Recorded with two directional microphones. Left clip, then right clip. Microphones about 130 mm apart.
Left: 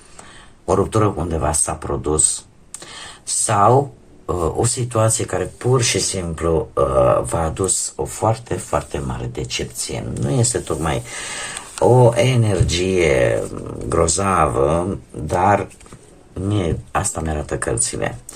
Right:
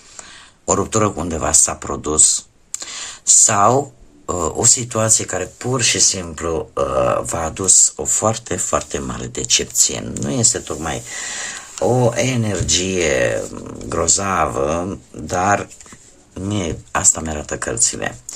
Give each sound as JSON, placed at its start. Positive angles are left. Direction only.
{"t": 0.2, "sound": "speech", "side_deg": -35}
{"t": 2.7, "sound": "a sound", "side_deg": -35}
{"t": 4.3, "sound": "speech", "side_deg": -35}
{"t": 7.9, "sound": "speech", "side_deg": -60}
{"t": 10.2, "sound": "speech", "side_deg": -40}
{"t": 10.4, "sound": "speech", "side_deg": -20}